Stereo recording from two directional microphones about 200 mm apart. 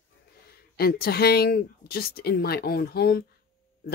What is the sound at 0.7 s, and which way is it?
Speech, 50° left (ahead or behind).